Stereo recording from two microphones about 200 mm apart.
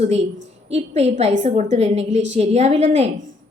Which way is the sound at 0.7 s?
30° right (ahead or behind).